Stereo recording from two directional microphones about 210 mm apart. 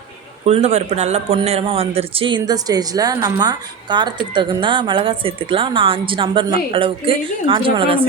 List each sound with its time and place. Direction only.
0.4 s a man's voice: 30° right (ahead or behind)